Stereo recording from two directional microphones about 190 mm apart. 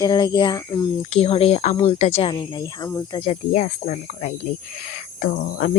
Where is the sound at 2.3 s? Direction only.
20° left (ahead or behind).